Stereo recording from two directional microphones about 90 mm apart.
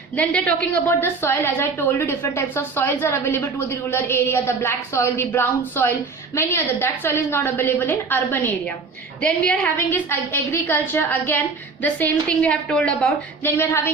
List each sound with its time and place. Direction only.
0.2 s a woman's voice: 15° left (ahead or behind)
0.9 s a woman's voice: 25° left (ahead or behind)
9.2 s a woman's voice: 10° left (ahead or behind)
9.7 s a woman's voice: 25° left (ahead or behind)
13.4 s a woman's voice: 25° left (ahead or behind)